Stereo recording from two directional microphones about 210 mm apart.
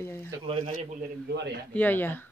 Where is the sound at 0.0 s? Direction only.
10° left (ahead or behind).